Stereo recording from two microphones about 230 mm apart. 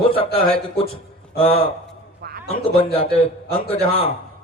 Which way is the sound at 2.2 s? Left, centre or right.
Right.